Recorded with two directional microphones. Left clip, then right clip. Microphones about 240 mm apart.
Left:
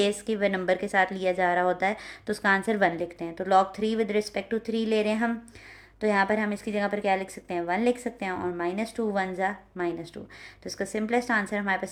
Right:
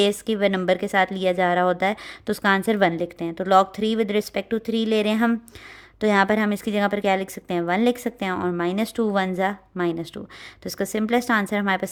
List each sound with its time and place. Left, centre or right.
0.0 s a woman's voice: right